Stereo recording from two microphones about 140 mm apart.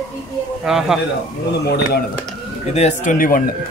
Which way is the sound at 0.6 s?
5° right (ahead or behind).